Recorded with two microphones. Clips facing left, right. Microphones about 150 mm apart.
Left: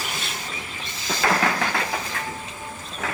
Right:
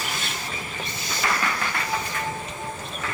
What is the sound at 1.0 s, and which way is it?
Train, 90° left.